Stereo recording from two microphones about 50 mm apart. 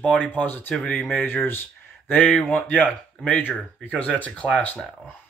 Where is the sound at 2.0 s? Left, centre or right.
Left.